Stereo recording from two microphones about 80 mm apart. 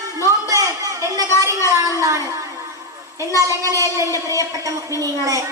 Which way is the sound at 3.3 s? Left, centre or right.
Right.